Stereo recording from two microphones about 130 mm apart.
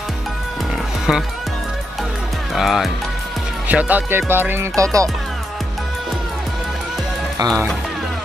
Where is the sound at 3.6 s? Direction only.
10° right (ahead or behind).